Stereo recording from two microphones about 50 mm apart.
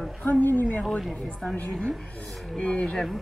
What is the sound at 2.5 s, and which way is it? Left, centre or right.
Speech, left.